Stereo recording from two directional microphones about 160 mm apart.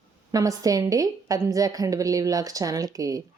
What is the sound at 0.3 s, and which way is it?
Speech, 20° right (ahead or behind).